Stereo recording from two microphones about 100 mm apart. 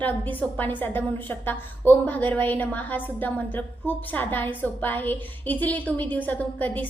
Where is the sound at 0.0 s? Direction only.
15° left (ahead or behind).